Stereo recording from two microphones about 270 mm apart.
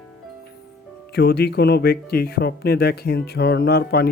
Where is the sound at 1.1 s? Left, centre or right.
Left.